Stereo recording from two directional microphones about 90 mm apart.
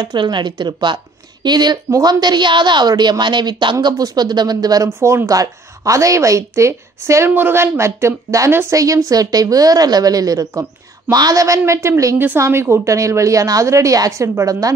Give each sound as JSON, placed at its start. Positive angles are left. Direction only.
{"t": 0.0, "sound": "a woman's voice", "side_deg": -60}
{"t": 4.8, "sound": "a woman's voice", "side_deg": -30}